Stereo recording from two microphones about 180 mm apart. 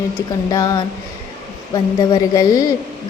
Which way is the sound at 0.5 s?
20° left (ahead or behind).